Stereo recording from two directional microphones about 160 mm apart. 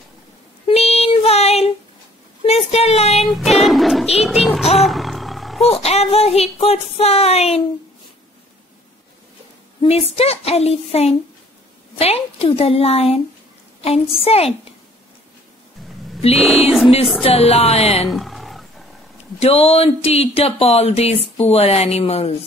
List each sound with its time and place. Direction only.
0.7 s child singing: 40° left (ahead or behind)
2.4 s a sound: 40° left (ahead or behind)
3.2 s a sound: centre (ahead or behind)
4.7 s roaring cats: centre (ahead or behind)
5.7 s speech: 40° left (ahead or behind)
9.8 s speech: 40° left (ahead or behind)
16.3 s speech: centre (ahead or behind)
17.2 s speech: 40° left (ahead or behind)
18.0 s roaring cats: centre (ahead or behind)
19.4 s speech: 40° left (ahead or behind)